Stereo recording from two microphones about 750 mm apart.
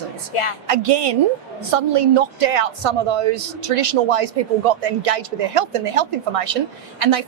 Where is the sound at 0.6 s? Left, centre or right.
Right.